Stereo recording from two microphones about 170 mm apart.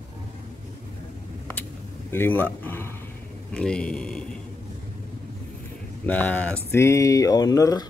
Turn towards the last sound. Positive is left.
turn(degrees=20)  # may be behind; listen again after turning